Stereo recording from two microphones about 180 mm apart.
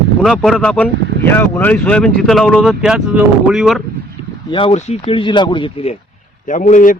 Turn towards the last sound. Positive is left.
turn(degrees=45)  # may be behind; listen again after turning